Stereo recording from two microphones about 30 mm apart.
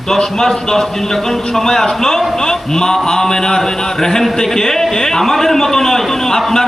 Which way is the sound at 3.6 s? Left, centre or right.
Centre.